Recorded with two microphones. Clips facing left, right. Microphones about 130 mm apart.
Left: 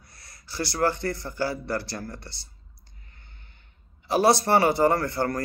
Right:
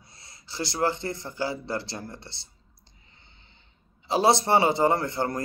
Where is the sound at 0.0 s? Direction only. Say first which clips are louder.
Even; 25° right (ahead or behind).